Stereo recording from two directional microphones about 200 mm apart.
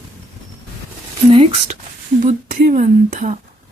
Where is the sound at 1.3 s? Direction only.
25° right (ahead or behind).